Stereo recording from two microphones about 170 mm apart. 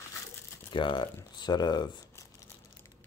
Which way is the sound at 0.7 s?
30° left (ahead or behind).